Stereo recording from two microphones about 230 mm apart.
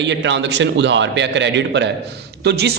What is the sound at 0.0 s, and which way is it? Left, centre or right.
A man's voice, right.